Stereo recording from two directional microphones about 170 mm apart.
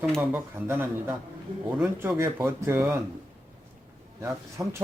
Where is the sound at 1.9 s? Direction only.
15° right (ahead or behind).